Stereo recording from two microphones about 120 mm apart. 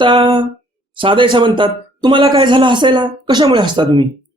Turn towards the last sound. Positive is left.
turn(degrees=-40)  # may be behind; listen again after turning